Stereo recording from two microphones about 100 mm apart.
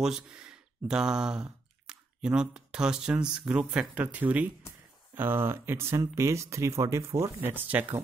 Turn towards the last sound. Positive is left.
turn(degrees=-20)  # may be behind; listen again after turning